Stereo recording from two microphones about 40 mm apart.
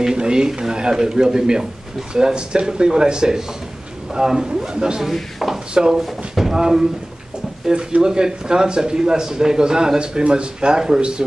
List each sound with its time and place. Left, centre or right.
0.0 s a man's voice: centre
5.0 s speech: centre
8.0 s a man's voice: centre